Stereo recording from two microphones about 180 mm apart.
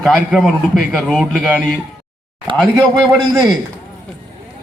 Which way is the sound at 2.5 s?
30° right (ahead or behind).